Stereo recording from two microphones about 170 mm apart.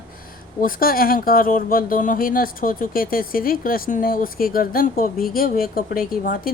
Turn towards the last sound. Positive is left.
turn(degrees=60)  # may be behind; listen again after turning